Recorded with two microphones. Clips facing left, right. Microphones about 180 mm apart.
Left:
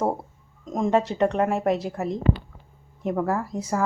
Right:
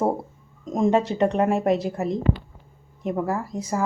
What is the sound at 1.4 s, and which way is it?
Speech, centre (ahead or behind).